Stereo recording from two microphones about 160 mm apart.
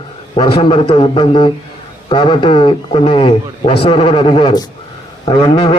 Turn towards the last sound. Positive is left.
turn(degrees=35)  # may be behind; listen again after turning